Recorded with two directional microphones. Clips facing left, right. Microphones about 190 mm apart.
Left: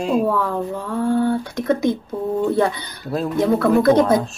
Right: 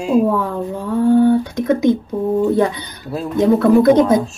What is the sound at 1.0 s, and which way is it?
A woman's voice, 15° right (ahead or behind).